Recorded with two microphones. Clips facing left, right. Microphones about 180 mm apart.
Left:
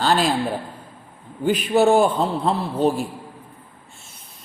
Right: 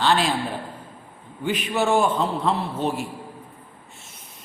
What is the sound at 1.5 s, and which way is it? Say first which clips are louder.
A man's voice: left 6 dB; 35° left (ahead or behind).